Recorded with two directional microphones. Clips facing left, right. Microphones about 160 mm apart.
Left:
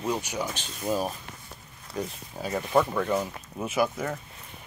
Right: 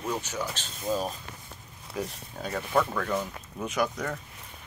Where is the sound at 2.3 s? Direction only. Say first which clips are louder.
Left 3 dB; 10° left (ahead or behind).